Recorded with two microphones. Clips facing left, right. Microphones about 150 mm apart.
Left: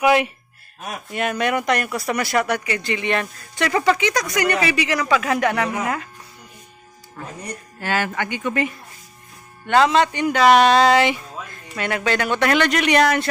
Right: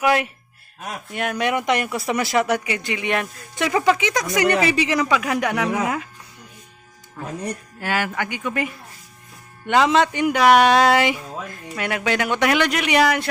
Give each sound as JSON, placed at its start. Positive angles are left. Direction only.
{"t": 0.0, "sound": "speech", "side_deg": 0}
{"t": 2.6, "sound": "speech", "side_deg": -15}
{"t": 3.9, "sound": "speech", "side_deg": -20}
{"t": 5.1, "sound": "speech", "side_deg": 0}
{"t": 7.8, "sound": "speech", "side_deg": -10}
{"t": 9.6, "sound": "speech", "side_deg": -15}